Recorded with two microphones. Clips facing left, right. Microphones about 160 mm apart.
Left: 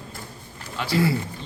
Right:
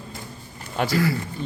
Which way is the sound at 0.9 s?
25° left (ahead or behind).